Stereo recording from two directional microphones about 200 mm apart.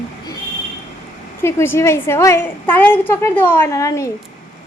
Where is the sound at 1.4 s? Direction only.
10° left (ahead or behind).